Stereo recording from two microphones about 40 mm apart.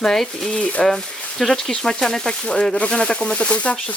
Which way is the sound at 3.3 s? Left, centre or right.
Left.